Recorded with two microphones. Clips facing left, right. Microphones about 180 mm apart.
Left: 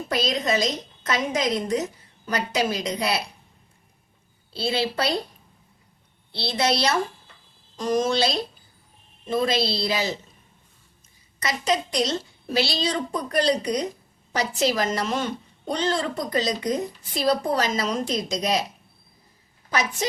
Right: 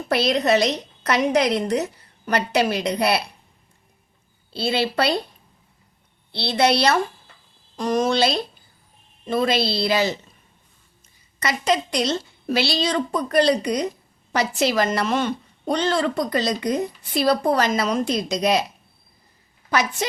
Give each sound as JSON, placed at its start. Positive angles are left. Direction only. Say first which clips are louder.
{"t": 0.1, "sound": "a woman's voice", "louder": "right 6 dB", "side_deg": -65}
{"t": 4.5, "sound": "a woman's voice", "louder": "right 3 dB", "side_deg": -60}
{"t": 6.3, "sound": "a woman's voice", "louder": "right 4 dB", "side_deg": -65}
{"t": 9.3, "sound": "a woman's voice", "louder": "right 2 dB", "side_deg": -65}
{"t": 11.3, "sound": "a woman's voice", "louder": "right 3 dB", "side_deg": -65}